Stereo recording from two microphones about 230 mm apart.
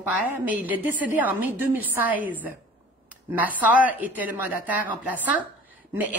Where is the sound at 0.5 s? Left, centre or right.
Centre.